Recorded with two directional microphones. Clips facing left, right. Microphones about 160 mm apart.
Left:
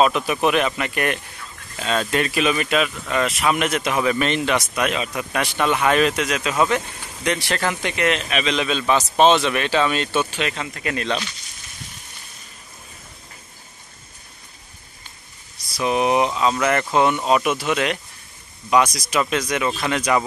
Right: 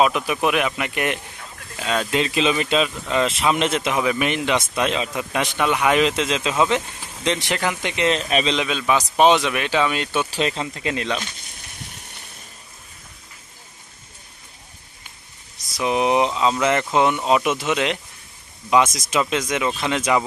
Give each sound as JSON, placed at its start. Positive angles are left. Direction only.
{"t": 0.0, "sound": "speech", "side_deg": -10}
{"t": 8.1, "sound": "speech", "side_deg": -35}
{"t": 8.5, "sound": "speech", "side_deg": -10}
{"t": 10.3, "sound": "speech", "side_deg": -30}
{"t": 15.7, "sound": "speech", "side_deg": -20}